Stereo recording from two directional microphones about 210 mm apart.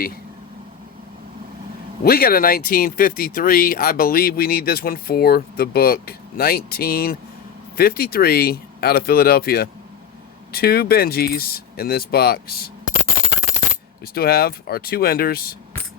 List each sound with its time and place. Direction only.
2.0 s speech: 45° left (ahead or behind)
14.0 s speech: 45° left (ahead or behind)